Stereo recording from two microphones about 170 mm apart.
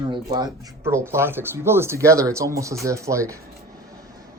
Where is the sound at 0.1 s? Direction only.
25° right (ahead or behind).